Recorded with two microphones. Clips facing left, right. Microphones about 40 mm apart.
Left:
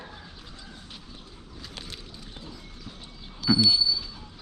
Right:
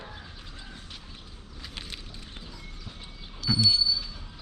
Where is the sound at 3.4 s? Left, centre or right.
Centre.